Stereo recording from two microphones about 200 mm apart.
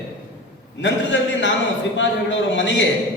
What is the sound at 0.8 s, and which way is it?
Speech, 65° left (ahead or behind).